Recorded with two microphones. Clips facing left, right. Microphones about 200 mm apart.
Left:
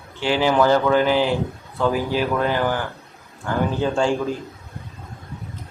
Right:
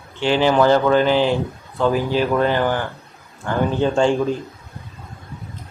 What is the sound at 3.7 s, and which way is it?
Speech, 20° right (ahead or behind).